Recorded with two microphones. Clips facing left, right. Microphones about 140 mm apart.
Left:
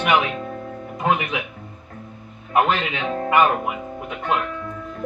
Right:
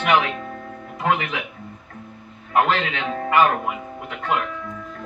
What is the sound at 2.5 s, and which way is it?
Speech, 20° left (ahead or behind).